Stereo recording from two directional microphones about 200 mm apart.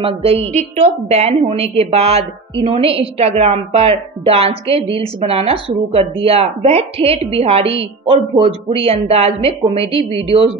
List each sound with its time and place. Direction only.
0.0 s a woman's voice: 30° right (ahead or behind)